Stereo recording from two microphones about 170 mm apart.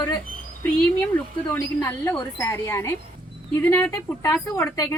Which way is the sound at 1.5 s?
10° left (ahead or behind).